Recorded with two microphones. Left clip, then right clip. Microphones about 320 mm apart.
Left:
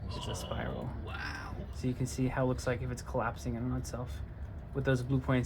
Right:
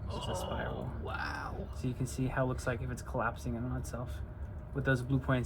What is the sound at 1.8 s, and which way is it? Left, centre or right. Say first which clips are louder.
Speech: left 4 dB; left.